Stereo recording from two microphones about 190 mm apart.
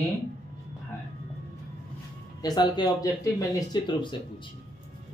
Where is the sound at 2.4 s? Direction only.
20° left (ahead or behind).